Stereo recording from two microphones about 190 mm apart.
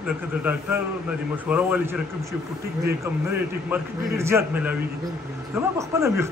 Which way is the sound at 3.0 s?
10° right (ahead or behind).